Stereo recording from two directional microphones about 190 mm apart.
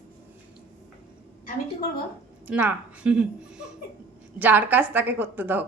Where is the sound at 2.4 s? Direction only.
10° right (ahead or behind).